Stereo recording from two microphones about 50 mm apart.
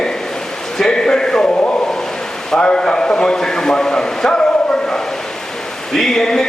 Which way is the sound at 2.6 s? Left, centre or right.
Centre.